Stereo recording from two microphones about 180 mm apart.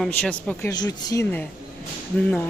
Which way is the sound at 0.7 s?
20° left (ahead or behind).